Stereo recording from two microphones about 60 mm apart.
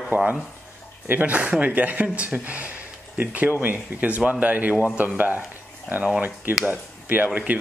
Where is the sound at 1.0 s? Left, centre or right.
Right.